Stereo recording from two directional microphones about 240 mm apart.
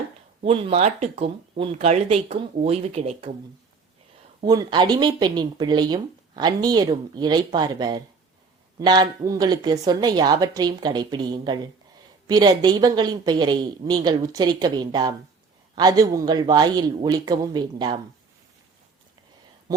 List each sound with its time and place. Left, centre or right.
0.4 s speech: right
4.4 s speech: centre